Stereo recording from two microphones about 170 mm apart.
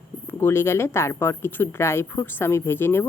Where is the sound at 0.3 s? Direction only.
15° left (ahead or behind).